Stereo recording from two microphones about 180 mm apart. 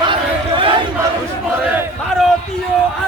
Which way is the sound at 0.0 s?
25° right (ahead or behind).